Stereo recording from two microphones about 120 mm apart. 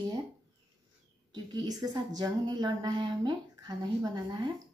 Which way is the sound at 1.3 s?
35° right (ahead or behind).